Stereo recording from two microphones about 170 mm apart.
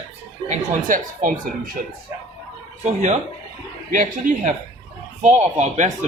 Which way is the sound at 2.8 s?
45° right (ahead or behind).